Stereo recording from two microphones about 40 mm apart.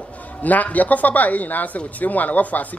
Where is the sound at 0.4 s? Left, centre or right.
Left.